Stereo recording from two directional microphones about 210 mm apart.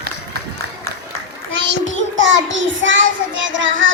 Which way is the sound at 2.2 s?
60° right (ahead or behind).